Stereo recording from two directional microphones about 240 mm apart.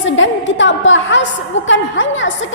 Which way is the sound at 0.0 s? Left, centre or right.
Left.